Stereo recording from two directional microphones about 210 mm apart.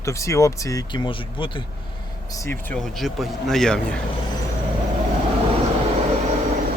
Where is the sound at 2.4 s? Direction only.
5° left (ahead or behind).